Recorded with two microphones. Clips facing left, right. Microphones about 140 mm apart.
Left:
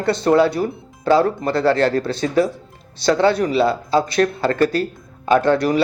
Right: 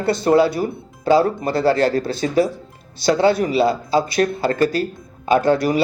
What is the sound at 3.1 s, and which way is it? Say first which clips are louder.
A man's voice: even; 10° right (ahead or behind).